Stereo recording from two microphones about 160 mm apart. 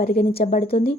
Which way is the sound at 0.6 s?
75° left (ahead or behind).